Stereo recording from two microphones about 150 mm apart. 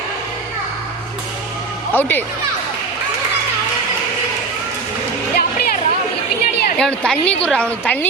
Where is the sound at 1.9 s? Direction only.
10° left (ahead or behind).